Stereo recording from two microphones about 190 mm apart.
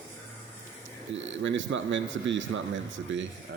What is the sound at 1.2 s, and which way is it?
Speech, 75° right (ahead or behind).